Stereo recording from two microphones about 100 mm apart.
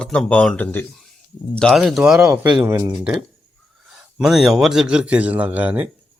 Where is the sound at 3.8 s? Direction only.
5° right (ahead or behind).